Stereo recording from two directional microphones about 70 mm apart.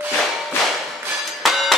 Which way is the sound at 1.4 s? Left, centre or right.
Centre.